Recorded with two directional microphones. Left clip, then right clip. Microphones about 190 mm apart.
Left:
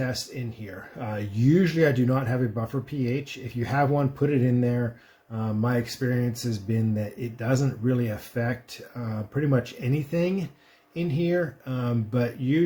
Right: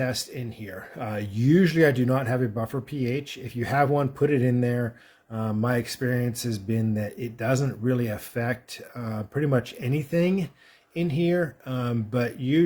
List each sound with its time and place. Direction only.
0.6 s speech: 40° right (ahead or behind)